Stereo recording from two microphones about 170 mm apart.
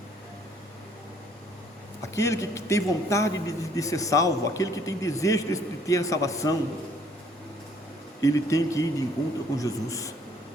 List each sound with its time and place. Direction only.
2.1 s a man's voice: 15° left (ahead or behind)
8.2 s a man's voice: 20° left (ahead or behind)